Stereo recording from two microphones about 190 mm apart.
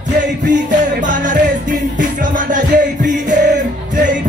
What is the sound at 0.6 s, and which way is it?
Music, 40° right (ahead or behind).